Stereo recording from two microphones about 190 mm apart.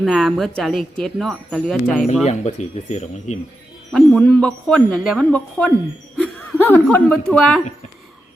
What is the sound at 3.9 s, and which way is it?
Speech, centre (ahead or behind).